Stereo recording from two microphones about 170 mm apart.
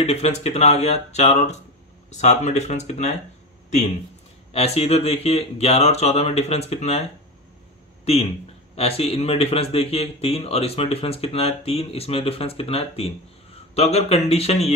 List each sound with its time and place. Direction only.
0.0 s a man's voice: 40° left (ahead or behind)
4.5 s a man's voice: 35° left (ahead or behind)